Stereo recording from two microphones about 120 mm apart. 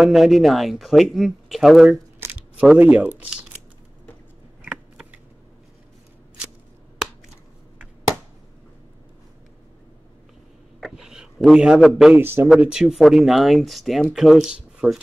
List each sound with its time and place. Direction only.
0.0 s speech: 5° right (ahead or behind)
2.1 s shuffling cards: 20° right (ahead or behind)
2.8 s speech: 10° right (ahead or behind)
4.6 s scissors: 10° right (ahead or behind)
10.8 s a sound: 5° right (ahead or behind)
12.2 s speech: 20° right (ahead or behind)
12.4 s speech: 5° right (ahead or behind)